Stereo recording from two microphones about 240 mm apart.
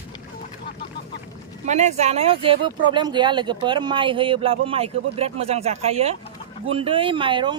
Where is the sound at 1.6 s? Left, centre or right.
Right.